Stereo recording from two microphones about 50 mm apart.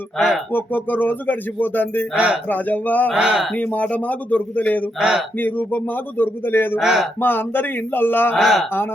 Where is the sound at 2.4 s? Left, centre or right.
Left.